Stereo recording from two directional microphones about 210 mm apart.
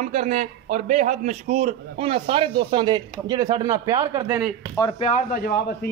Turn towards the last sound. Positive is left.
turn(degrees=40)  # may be behind; listen again after turning